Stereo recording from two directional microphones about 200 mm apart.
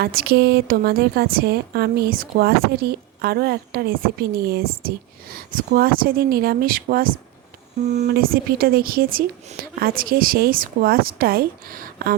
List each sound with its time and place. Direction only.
0.0 s a woman's voice: 50° right (ahead or behind)